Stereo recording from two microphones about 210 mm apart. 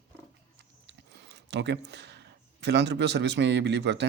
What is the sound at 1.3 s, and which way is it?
A man's voice, 55° right (ahead or behind).